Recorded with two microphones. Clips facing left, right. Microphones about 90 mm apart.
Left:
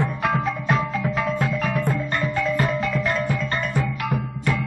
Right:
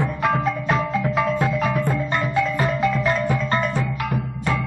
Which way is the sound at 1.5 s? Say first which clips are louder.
Right 2 dB; 15° right (ahead or behind).